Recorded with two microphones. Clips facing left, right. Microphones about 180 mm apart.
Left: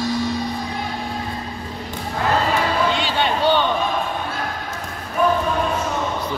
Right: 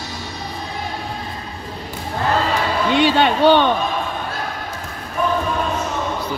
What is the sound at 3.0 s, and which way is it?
Speech, 60° right (ahead or behind).